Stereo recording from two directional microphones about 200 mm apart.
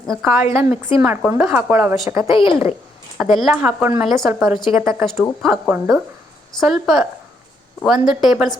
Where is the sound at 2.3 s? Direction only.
25° left (ahead or behind).